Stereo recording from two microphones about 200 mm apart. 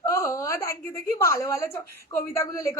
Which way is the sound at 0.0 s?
15° left (ahead or behind).